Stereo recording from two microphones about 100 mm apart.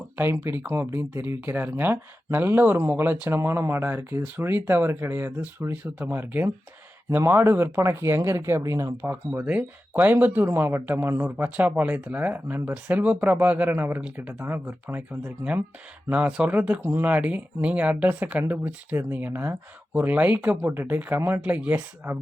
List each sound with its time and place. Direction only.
0.2 s speech: 20° right (ahead or behind)